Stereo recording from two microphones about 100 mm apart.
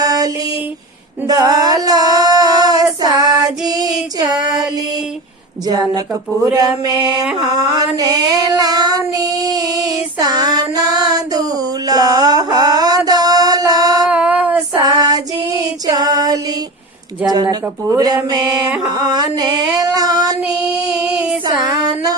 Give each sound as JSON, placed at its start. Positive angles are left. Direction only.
{"t": 0.0, "sound": "female singing", "side_deg": -40}
{"t": 1.3, "sound": "female singing", "side_deg": -40}
{"t": 3.8, "sound": "child singing", "side_deg": -40}
{"t": 4.4, "sound": "music", "side_deg": -40}
{"t": 5.6, "sound": "a sound", "side_deg": -45}
{"t": 7.9, "sound": "child singing", "side_deg": -40}
{"t": 10.2, "sound": "a sound", "side_deg": -40}
{"t": 14.1, "sound": "child singing", "side_deg": -10}
{"t": 14.8, "sound": "child singing", "side_deg": -40}
{"t": 21.6, "sound": "a sound", "side_deg": -40}